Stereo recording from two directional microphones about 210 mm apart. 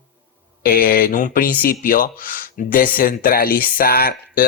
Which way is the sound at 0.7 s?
45° left (ahead or behind).